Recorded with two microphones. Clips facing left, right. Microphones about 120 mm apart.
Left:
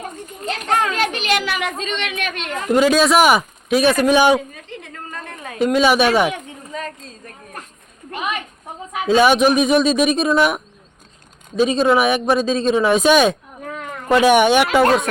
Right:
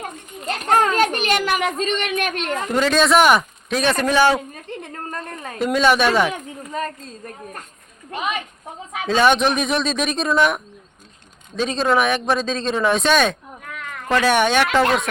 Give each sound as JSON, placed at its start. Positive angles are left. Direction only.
{"t": 0.4, "sound": "a child's voice", "side_deg": -45}
{"t": 2.7, "sound": "speech", "side_deg": 5}
{"t": 4.4, "sound": "a sound", "side_deg": -50}
{"t": 5.5, "sound": "speech", "side_deg": 0}
{"t": 9.0, "sound": "speech", "side_deg": 5}
{"t": 13.6, "sound": "a sound", "side_deg": 35}
{"t": 14.1, "sound": "speech", "side_deg": 15}